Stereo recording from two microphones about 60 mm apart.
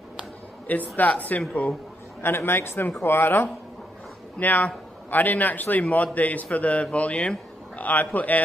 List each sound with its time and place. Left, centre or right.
0.9 s a man's voice: left
2.2 s speech: left
4.4 s a man's voice: left